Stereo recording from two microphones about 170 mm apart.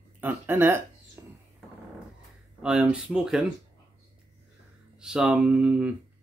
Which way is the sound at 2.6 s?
5° right (ahead or behind).